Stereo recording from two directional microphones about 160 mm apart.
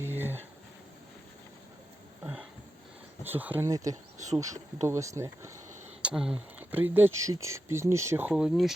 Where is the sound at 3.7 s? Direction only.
20° right (ahead or behind).